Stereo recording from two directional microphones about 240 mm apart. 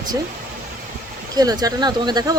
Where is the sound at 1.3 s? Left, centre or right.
Centre.